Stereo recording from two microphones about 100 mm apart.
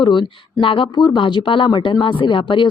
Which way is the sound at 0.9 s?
40° left (ahead or behind).